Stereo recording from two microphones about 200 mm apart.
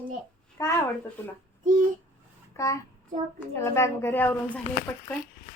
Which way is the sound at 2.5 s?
15° left (ahead or behind).